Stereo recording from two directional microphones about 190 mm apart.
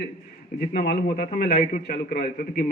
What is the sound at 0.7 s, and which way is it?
Speech, 50° left (ahead or behind).